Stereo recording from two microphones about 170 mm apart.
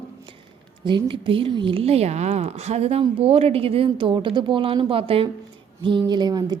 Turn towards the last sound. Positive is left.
turn(degrees=-25)  # may be behind; listen again after turning